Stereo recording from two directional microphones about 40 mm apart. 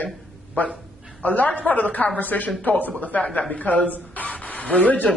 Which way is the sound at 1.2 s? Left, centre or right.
Left.